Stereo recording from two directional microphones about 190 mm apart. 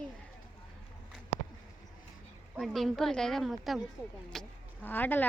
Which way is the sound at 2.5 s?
Centre (ahead or behind).